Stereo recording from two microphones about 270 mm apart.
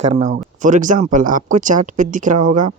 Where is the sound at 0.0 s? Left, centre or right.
Right.